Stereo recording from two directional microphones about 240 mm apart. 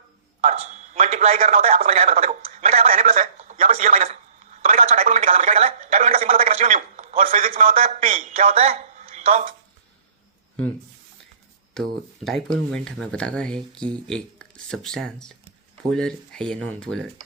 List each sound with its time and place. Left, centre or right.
0.4 s a man's voice: right
11.7 s speech: centre